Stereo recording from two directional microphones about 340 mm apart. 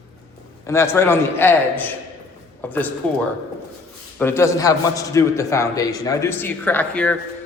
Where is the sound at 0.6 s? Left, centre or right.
Centre.